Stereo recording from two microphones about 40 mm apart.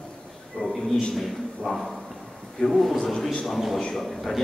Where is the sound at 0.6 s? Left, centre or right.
Left.